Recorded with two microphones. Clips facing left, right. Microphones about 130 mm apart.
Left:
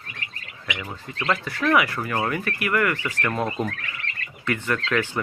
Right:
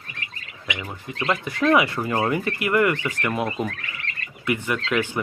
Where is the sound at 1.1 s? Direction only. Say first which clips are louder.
Right 1 dB; 15° right (ahead or behind).